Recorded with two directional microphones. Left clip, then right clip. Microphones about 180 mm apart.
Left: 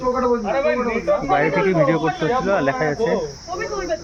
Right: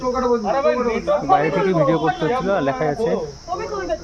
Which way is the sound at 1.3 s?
10° right (ahead or behind).